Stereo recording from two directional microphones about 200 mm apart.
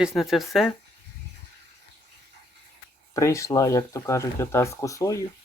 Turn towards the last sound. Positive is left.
turn(degrees=15)  # may be behind; listen again after turning